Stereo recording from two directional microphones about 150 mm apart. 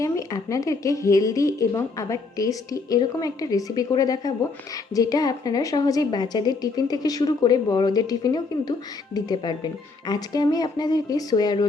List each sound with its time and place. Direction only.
0.0 s speech: 25° left (ahead or behind)